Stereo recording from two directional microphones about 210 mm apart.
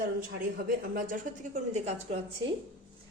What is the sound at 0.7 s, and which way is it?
A woman's voice, 40° right (ahead or behind).